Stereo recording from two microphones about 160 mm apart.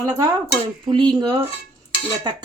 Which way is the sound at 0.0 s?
25° right (ahead or behind).